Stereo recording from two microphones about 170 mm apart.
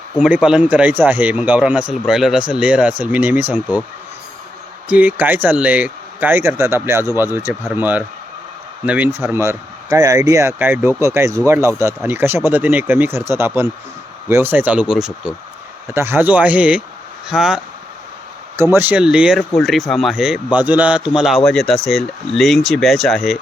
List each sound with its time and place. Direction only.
0.2 s speech: 5° right (ahead or behind)
4.9 s speech: 10° right (ahead or behind)
15.9 s speech: 15° right (ahead or behind)
18.7 s speech: 10° right (ahead or behind)